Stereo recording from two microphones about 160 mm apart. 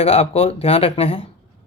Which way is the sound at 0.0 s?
40° left (ahead or behind).